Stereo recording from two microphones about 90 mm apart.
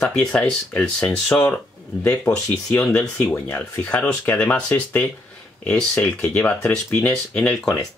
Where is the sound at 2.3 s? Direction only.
5° left (ahead or behind).